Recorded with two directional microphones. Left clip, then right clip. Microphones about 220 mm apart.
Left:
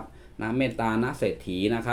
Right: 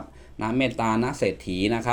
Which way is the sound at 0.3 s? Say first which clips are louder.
Right 3 dB; 30° right (ahead or behind).